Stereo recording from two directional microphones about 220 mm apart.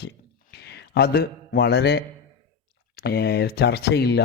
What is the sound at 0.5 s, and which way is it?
A man's voice, 50° left (ahead or behind).